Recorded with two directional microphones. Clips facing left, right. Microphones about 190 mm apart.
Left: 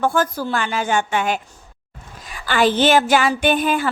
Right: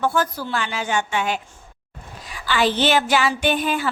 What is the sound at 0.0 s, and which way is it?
Speech, 50° left (ahead or behind).